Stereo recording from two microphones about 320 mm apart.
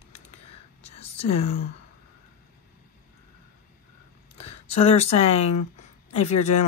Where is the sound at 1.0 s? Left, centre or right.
Centre.